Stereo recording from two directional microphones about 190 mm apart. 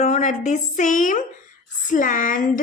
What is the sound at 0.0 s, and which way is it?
A woman's voice, 40° left (ahead or behind).